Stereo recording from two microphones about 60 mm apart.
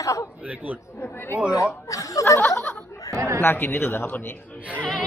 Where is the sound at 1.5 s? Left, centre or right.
Left.